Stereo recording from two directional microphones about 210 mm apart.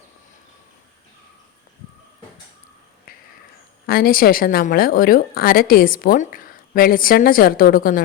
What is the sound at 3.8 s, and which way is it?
A woman's voice, 45° left (ahead or behind).